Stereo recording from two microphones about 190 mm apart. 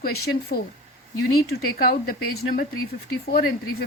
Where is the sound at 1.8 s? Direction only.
50° left (ahead or behind).